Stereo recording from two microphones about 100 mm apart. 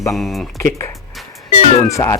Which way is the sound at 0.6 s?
30° left (ahead or behind).